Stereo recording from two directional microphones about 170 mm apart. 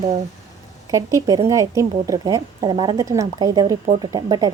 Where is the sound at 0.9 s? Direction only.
20° right (ahead or behind).